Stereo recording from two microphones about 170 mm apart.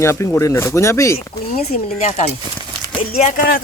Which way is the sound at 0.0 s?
15° left (ahead or behind).